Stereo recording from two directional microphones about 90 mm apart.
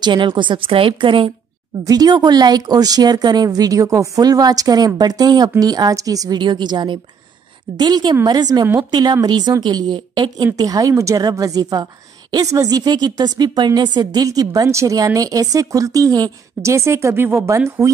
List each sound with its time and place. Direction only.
0.0 s a woman's voice: 60° right (ahead or behind); by 1.3 s 80° right
1.9 s a woman's voice: 45° right (ahead or behind); by 17.9 s 30° right (ahead or behind)